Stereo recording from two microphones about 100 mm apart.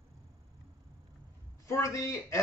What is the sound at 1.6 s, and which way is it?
Speech, 30° left (ahead or behind).